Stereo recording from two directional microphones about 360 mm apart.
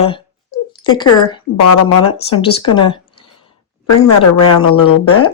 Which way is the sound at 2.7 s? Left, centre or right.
Centre.